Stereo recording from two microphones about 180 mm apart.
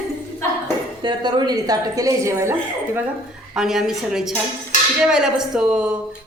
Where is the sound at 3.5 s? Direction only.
Centre (ahead or behind).